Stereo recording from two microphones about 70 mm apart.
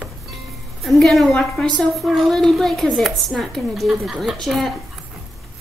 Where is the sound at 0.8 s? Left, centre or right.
Centre.